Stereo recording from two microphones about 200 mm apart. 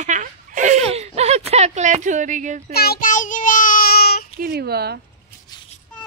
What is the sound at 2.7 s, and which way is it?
Child singing, 50° left (ahead or behind).